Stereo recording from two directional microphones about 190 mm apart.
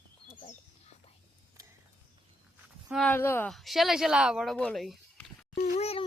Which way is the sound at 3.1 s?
10° left (ahead or behind).